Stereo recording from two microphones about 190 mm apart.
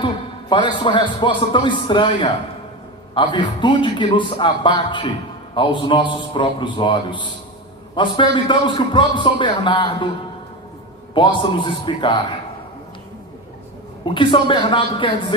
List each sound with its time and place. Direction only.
0.5 s a man's voice: 25° left (ahead or behind)
11.1 s a man's voice: 25° left (ahead or behind)
14.0 s a man's voice: 25° left (ahead or behind)